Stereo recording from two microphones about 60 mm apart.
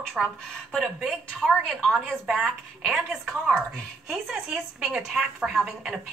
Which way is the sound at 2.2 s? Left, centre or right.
Centre.